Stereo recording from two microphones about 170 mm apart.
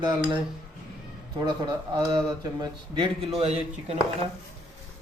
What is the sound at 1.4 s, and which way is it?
Speech, 25° right (ahead or behind).